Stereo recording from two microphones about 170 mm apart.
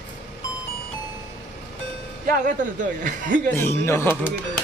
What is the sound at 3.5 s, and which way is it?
Speech, 15° left (ahead or behind).